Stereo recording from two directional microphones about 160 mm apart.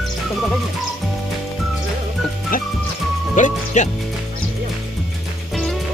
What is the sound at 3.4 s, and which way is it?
Speech, 50° left (ahead or behind).